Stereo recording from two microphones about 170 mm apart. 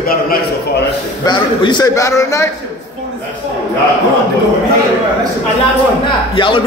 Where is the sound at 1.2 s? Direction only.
25° left (ahead or behind).